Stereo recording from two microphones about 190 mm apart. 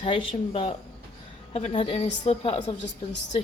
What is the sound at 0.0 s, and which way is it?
A woman's voice, 30° left (ahead or behind).